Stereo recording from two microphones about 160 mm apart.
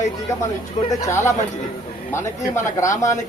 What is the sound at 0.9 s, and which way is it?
A man's voice, 15° left (ahead or behind).